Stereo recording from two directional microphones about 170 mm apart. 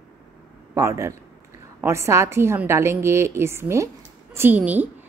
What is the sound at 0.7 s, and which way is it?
A woman's voice, 20° right (ahead or behind).